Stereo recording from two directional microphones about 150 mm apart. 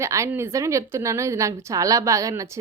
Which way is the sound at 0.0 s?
20° right (ahead or behind).